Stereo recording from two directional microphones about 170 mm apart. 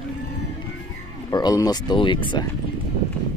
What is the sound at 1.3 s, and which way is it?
Speech, 20° left (ahead or behind).